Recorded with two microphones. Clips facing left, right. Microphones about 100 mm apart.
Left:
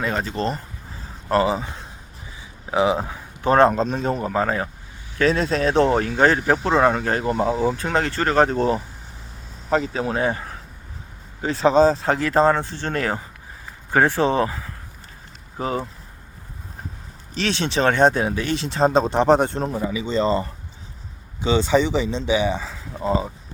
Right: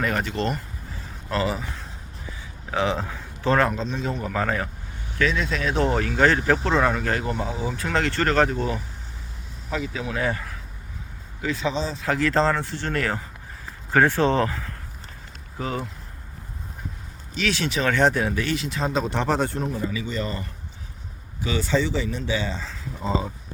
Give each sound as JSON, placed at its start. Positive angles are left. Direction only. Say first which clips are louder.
{"t": 0.0, "sound": "speech", "louder": "left 1 dB", "side_deg": 30}
{"t": 3.7, "sound": "speech", "louder": "left 6 dB", "side_deg": 45}
{"t": 4.3, "sound": "speech", "louder": "left 3 dB", "side_deg": 25}
{"t": 5.1, "sound": "speech", "louder": "left 5 dB", "side_deg": 40}
{"t": 7.9, "sound": "speech", "louder": "left 1 dB", "side_deg": 20}
{"t": 8.4, "sound": "a man's voice", "louder": "left 6 dB", "side_deg": 35}
{"t": 12.0, "sound": "speech", "louder": "left 4 dB", "side_deg": 20}
{"t": 15.5, "sound": "speech", "louder": "left 4 dB", "side_deg": 30}
{"t": 17.3, "sound": "speech", "louder": "left 3 dB", "side_deg": 25}
{"t": 19.1, "sound": "speech", "louder": "left 7 dB", "side_deg": 20}
{"t": 19.5, "sound": "speech", "louder": "left 3 dB", "side_deg": 35}
{"t": 23.0, "sound": "speech", "louder": "left 4 dB", "side_deg": 5}